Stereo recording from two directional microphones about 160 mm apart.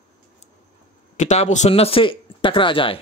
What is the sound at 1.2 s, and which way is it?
Speech, 50° left (ahead or behind).